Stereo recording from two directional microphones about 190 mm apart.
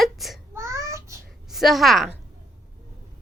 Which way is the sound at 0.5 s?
15° right (ahead or behind).